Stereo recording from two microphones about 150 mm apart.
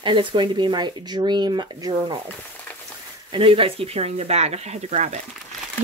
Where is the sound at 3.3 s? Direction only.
35° right (ahead or behind).